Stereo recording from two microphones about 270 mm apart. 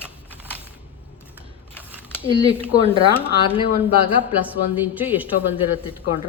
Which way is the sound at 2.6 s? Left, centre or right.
Centre.